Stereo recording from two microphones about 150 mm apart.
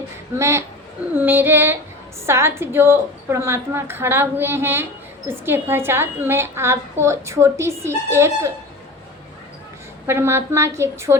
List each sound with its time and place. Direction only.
0.3 s a woman's voice: 20° right (ahead or behind)
1.1 s female singing: 15° right (ahead or behind)
2.2 s a woman's voice: 15° right (ahead or behind)
10.1 s a woman's voice: 15° right (ahead or behind)